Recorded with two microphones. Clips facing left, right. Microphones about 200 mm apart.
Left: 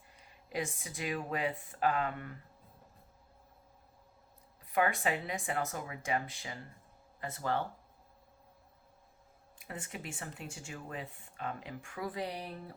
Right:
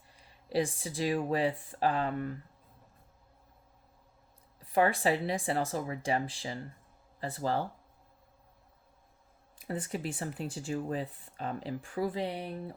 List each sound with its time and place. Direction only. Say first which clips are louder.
0.4 s speech: right 7 dB; 30° right (ahead or behind)
4.7 s speech: right 4 dB; 35° right (ahead or behind)
9.6 s speech: right 8 dB; 35° right (ahead or behind)